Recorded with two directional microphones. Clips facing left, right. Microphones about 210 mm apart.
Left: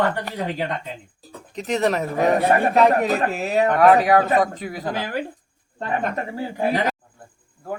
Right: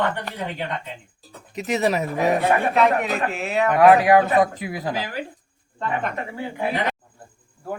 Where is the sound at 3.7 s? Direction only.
5° right (ahead or behind).